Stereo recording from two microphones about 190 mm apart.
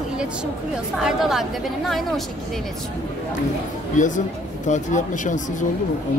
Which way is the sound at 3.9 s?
40° left (ahead or behind).